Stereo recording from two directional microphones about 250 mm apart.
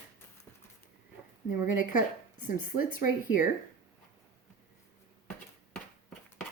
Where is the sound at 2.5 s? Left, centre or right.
Left.